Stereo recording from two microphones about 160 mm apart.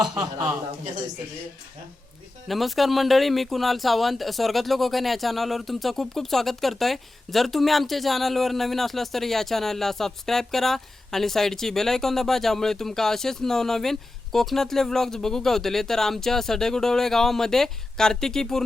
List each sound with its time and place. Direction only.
0.1 s a man's voice: 20° right (ahead or behind)
2.5 s a man's voice: centre (ahead or behind)